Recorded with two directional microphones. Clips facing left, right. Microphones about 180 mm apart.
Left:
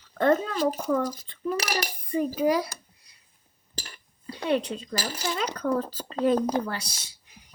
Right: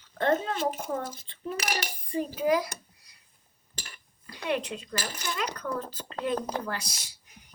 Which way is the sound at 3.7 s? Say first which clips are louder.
Left 5 dB; 35° left (ahead or behind).